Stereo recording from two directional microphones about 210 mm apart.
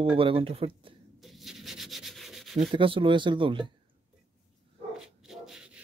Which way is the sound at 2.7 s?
25° right (ahead or behind).